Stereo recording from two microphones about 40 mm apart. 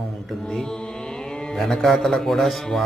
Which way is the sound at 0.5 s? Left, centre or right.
Centre.